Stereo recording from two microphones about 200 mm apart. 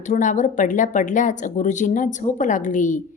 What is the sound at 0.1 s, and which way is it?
Speech, 40° left (ahead or behind).